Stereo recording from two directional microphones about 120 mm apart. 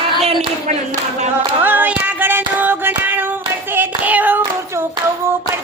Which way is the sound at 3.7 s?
15° right (ahead or behind).